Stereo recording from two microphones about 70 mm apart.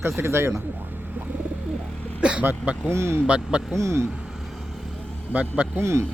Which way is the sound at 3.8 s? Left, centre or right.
Right.